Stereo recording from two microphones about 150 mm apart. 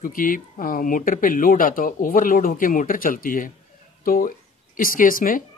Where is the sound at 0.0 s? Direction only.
65° left (ahead or behind).